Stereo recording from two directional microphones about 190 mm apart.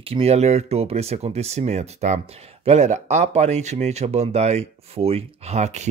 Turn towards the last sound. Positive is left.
turn(degrees=-35)  # may be behind; listen again after turning